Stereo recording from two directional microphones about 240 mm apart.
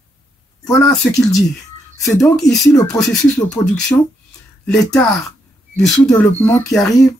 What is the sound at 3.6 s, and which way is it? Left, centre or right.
Speech, centre.